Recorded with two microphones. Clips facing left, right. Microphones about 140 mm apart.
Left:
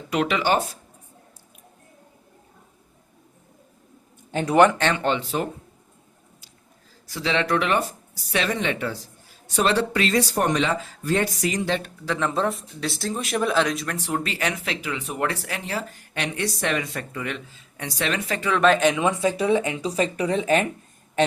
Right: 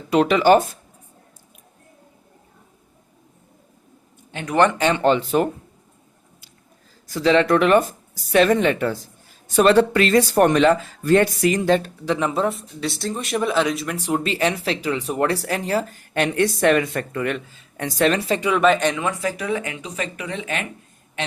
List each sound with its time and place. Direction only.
0.1 s speech: 35° right (ahead or behind)
4.3 s speech: 35° left (ahead or behind)
4.9 s speech: 40° right (ahead or behind)
7.1 s speech: 45° right (ahead or behind)
12.0 s speech: 20° right (ahead or behind)
12.3 s speech: 5° right (ahead or behind); by 18.2 s 45° right (ahead or behind)
18.3 s speech: 15° right (ahead or behind)
18.6 s speech: centre (ahead or behind)
18.9 s speech: 20° left (ahead or behind); by 20.7 s 35° left (ahead or behind)